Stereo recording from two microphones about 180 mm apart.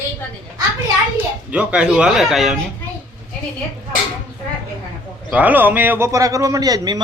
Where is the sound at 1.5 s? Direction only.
5° right (ahead or behind).